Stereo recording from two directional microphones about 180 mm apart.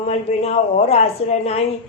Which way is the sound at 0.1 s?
35° left (ahead or behind).